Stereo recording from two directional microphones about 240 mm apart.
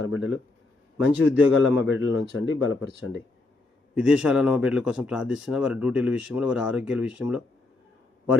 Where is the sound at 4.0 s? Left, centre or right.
Centre.